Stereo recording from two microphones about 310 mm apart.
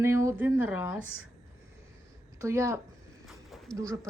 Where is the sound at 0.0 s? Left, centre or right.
Centre.